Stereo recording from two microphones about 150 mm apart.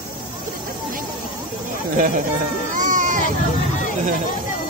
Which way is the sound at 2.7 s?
60° right (ahead or behind).